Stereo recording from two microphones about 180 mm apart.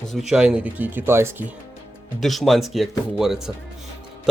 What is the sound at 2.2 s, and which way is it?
Speech, centre (ahead or behind).